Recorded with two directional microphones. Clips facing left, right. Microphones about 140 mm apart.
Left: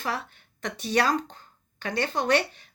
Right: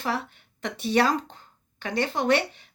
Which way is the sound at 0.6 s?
25° right (ahead or behind).